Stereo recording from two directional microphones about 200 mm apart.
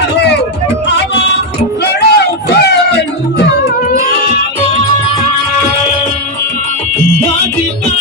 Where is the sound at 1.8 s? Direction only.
55° left (ahead or behind).